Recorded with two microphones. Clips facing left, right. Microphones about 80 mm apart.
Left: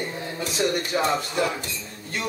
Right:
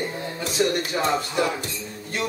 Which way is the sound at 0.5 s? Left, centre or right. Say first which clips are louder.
Right 1 dB; centre.